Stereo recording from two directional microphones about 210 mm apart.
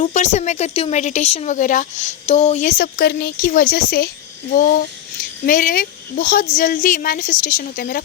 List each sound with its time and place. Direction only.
0.0 s speech: 35° left (ahead or behind)